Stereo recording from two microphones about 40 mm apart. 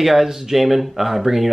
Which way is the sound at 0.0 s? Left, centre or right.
Centre.